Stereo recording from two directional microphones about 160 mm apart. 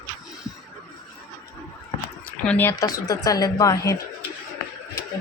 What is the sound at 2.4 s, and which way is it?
A woman's voice, 10° left (ahead or behind).